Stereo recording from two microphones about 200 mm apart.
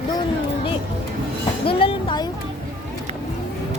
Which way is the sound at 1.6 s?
25° left (ahead or behind).